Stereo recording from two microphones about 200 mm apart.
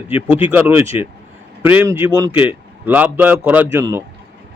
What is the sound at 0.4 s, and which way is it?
Speech, 10° right (ahead or behind).